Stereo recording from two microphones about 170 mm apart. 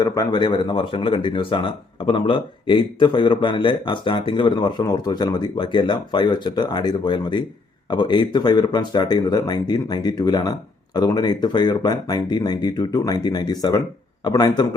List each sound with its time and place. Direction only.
0.0 s speech: 25° left (ahead or behind)